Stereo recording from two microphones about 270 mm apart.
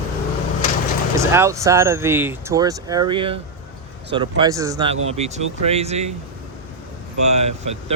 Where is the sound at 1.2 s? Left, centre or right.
Centre.